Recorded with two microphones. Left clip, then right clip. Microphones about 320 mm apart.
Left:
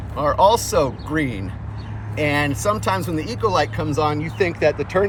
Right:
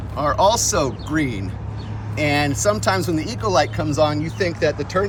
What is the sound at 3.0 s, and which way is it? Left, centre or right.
Speech, centre.